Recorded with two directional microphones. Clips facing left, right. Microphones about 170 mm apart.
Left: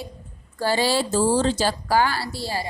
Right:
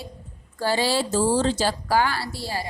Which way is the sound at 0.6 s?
45° left (ahead or behind).